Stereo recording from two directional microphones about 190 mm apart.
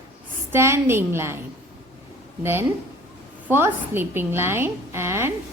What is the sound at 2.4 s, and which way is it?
A woman's voice, 10° right (ahead or behind).